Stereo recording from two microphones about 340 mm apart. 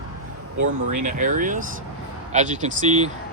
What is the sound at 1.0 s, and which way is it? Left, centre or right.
Speech, right.